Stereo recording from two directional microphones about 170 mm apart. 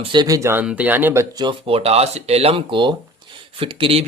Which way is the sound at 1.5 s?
35° right (ahead or behind).